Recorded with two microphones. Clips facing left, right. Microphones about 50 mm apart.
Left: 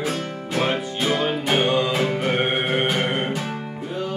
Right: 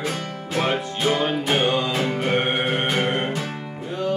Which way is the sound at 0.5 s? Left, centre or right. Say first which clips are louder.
Even; centre.